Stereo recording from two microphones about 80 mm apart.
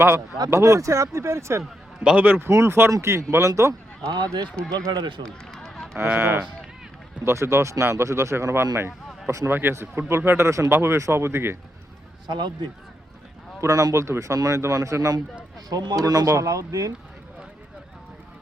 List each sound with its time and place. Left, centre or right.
0.5 s speech: right
2.0 s speech: right
4.9 s speech: right
5.2 s run: centre
6.1 s speech: right
9.5 s speech: right
13.6 s speech: right
15.7 s speech: right